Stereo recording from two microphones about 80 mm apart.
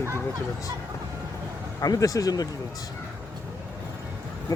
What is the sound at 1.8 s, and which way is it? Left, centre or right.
Speech, left.